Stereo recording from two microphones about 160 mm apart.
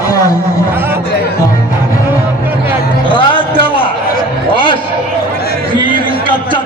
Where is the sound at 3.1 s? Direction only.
30° left (ahead or behind).